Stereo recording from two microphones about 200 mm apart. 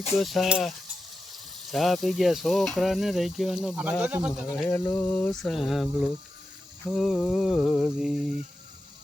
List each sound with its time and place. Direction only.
0.2 s speech: centre (ahead or behind)
4.7 s a sound: 10° left (ahead or behind)
5.3 s speech: centre (ahead or behind)